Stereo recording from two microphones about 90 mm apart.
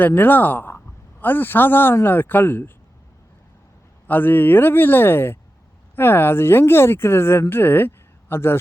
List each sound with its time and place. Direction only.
0.0 s speech: 20° left (ahead or behind)
4.0 s speech: 20° left (ahead or behind)